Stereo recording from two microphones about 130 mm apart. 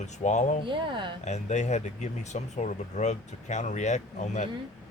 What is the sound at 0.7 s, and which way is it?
Speech, 40° right (ahead or behind).